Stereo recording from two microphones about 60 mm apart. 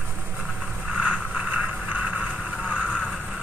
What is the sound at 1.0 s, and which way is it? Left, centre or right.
Vehicle, right.